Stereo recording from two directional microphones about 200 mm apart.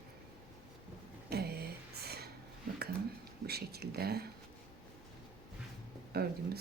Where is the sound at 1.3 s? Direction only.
50° right (ahead or behind).